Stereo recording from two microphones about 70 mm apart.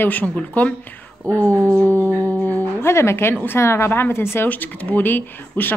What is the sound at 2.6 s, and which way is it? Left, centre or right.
A woman's voice, left.